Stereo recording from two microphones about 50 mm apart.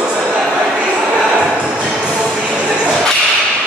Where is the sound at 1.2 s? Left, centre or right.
Right.